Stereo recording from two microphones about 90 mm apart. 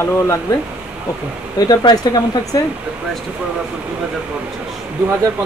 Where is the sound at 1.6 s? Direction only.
50° left (ahead or behind).